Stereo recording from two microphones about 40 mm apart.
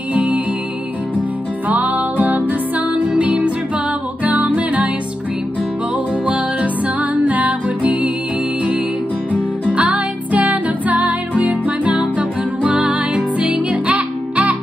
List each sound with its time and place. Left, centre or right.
0.1 s music: right
1.7 s music: right
6.2 s music: right
9.7 s music: right